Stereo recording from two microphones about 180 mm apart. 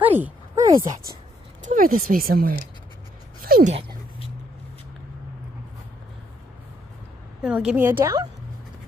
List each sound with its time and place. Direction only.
0.0 s speech: 10° right (ahead or behind)
0.7 s speech: 20° right (ahead or behind)
1.7 s speech: 45° right (ahead or behind)
7.4 s a woman's voice: 5° right (ahead or behind)